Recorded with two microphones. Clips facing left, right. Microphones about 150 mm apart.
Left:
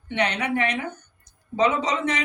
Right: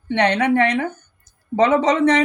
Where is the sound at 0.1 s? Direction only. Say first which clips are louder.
Right 7 dB; 60° right (ahead or behind).